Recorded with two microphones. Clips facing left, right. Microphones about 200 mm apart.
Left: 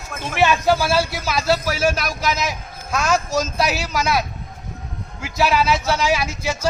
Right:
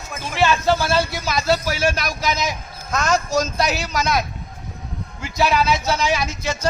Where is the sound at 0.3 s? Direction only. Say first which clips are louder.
Left 1 dB; 15° left (ahead or behind).